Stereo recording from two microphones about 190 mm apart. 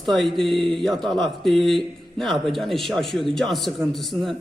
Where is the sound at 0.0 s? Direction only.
Centre (ahead or behind).